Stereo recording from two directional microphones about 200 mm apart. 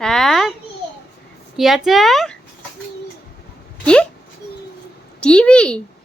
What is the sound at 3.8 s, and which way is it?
Speech, 5° left (ahead or behind).